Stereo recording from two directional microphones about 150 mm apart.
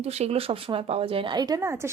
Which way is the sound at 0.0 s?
45° right (ahead or behind).